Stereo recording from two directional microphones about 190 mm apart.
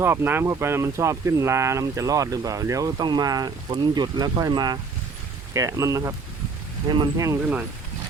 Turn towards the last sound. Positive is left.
turn(degrees=-15)  # may be behind; listen again after turning